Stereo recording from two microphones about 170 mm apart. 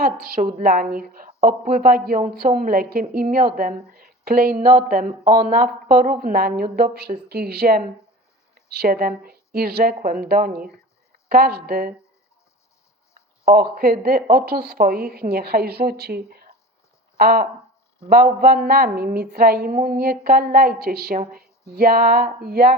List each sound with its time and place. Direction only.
0.0 s a woman's voice: 60° right (ahead or behind)
13.4 s speech: 60° right (ahead or behind)